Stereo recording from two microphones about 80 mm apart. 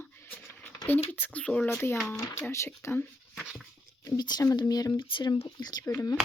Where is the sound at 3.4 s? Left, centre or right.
Centre.